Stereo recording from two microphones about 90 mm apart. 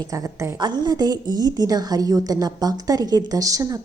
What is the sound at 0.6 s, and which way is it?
A woman's voice, 50° right (ahead or behind).